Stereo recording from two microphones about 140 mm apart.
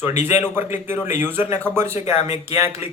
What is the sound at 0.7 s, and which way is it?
Speech, 15° right (ahead or behind).